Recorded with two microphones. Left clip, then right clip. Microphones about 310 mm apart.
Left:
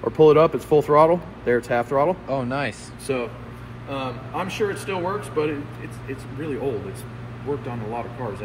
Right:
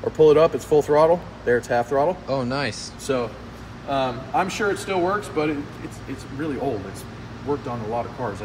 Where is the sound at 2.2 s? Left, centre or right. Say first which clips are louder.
Right 1 dB; centre.